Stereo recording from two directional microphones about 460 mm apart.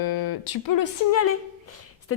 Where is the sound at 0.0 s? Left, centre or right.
Left.